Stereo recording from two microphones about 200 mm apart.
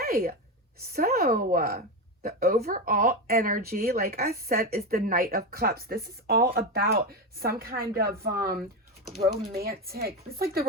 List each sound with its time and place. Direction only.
0.0 s speech: 50° right (ahead or behind)